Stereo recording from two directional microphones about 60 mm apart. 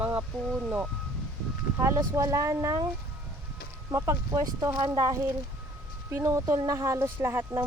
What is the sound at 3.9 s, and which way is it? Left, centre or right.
Speech, right.